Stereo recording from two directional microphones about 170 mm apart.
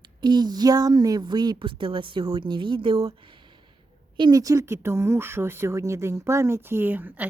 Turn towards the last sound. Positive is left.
turn(degrees=-10)  # may be behind; listen again after turning